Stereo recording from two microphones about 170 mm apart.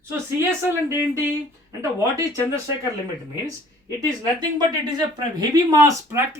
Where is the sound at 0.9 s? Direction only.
15° right (ahead or behind).